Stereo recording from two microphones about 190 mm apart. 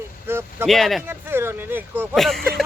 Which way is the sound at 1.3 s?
10° right (ahead or behind).